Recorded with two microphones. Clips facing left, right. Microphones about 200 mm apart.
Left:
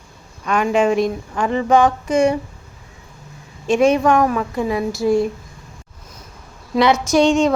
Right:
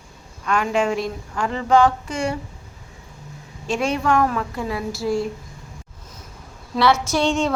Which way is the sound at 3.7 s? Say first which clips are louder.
Left 7 dB; 20° left (ahead or behind).